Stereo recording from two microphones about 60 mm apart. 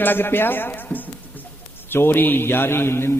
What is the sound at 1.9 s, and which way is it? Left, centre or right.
A man's voice, left.